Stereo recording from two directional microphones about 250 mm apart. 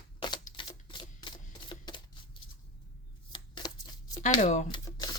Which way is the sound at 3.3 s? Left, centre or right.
Centre.